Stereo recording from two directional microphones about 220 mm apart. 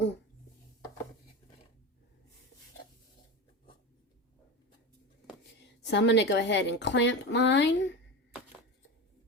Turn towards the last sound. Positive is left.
turn(degrees=55)  # may be behind; listen again after turning